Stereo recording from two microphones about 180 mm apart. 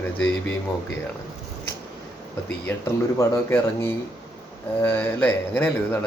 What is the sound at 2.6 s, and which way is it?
Speech, 15° left (ahead or behind).